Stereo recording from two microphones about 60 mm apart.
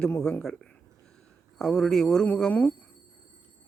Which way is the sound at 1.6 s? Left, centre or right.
Centre.